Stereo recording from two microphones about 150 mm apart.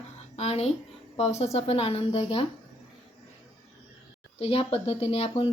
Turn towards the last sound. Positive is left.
turn(degrees=40)  # may be behind; listen again after turning